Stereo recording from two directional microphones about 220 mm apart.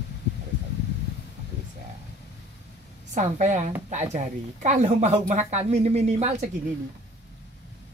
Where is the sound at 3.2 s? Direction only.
35° right (ahead or behind).